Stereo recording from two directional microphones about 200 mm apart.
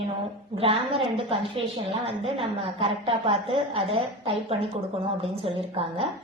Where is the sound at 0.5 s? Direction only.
30° right (ahead or behind).